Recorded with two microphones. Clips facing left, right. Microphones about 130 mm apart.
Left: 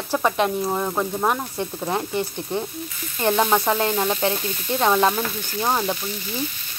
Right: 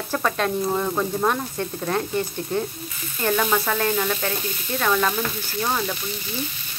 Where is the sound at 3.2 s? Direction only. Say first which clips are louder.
Left 3 dB; 20° left (ahead or behind).